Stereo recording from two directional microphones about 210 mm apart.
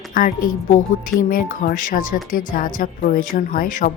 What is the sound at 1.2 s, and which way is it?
A woman's voice, 45° left (ahead or behind).